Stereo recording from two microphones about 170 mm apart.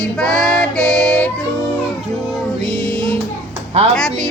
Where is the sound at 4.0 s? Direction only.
5° left (ahead or behind).